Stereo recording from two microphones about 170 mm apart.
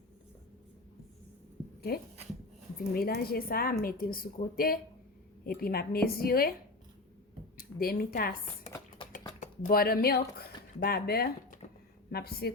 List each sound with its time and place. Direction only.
2.9 s a woman's voice: 65° left (ahead or behind)
7.5 s speech: 60° left (ahead or behind)
9.0 s a sound: 30° left (ahead or behind)
9.4 s a woman's voice: 60° left (ahead or behind)